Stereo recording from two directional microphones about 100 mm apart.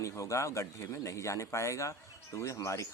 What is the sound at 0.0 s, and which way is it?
Speech, 30° left (ahead or behind).